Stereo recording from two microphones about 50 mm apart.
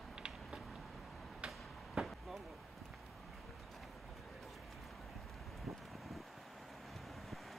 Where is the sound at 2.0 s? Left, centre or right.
Centre.